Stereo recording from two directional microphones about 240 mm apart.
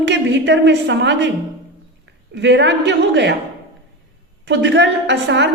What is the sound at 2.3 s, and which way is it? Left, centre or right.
A woman's voice, right.